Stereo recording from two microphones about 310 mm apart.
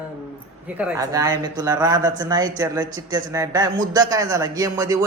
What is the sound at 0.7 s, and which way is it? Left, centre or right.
A man's voice, centre.